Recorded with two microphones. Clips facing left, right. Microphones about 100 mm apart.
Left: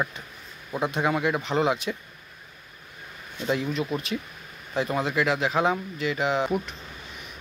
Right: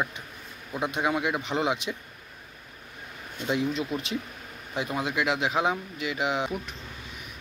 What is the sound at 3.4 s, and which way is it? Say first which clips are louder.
Speech: left 1 dB; 15° right (ahead or behind).